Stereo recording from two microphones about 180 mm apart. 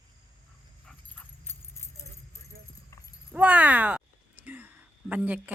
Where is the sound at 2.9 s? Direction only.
15° left (ahead or behind).